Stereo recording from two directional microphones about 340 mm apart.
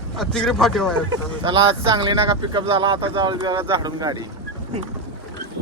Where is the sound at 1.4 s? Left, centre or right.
Centre.